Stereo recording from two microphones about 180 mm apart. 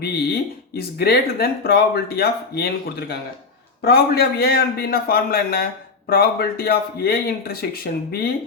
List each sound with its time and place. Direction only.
0.8 s speech: 60° left (ahead or behind)